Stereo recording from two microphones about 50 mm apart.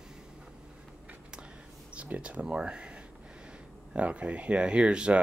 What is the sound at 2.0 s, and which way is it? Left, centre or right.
Speech, right.